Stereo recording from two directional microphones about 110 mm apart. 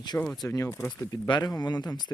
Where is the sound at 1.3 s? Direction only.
40° left (ahead or behind).